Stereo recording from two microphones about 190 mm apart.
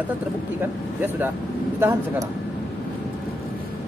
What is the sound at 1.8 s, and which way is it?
Speech, 15° right (ahead or behind).